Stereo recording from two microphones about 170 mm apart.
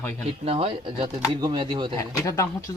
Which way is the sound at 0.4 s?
35° right (ahead or behind).